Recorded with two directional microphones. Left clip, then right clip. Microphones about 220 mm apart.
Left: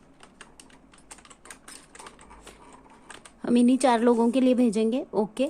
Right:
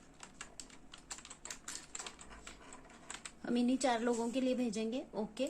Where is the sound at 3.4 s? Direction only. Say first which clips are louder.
Left 13 dB; 50° left (ahead or behind).